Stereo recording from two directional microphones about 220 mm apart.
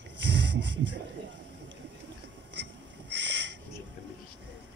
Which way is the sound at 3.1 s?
55° right (ahead or behind).